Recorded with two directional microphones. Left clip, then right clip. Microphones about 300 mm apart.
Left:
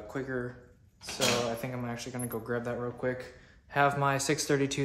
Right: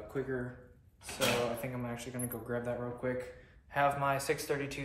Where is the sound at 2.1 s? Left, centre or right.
Left.